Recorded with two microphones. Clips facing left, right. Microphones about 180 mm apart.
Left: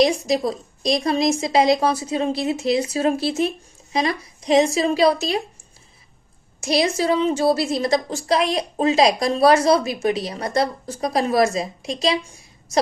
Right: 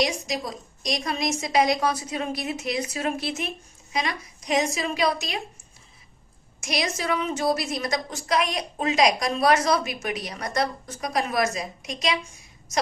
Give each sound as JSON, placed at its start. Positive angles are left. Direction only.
{"t": 0.0, "sound": "a woman's voice", "side_deg": 30}
{"t": 6.6, "sound": "a woman's voice", "side_deg": 30}